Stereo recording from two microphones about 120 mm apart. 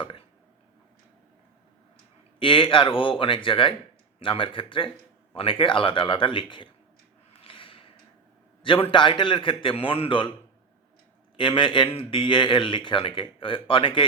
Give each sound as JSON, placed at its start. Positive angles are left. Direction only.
{"t": 2.4, "sound": "speech", "side_deg": 45}
{"t": 7.3, "sound": "snort", "side_deg": 45}
{"t": 8.6, "sound": "speech", "side_deg": 45}
{"t": 11.3, "sound": "speech", "side_deg": 45}